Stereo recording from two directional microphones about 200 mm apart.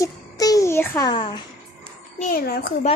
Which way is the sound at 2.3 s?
50° left (ahead or behind).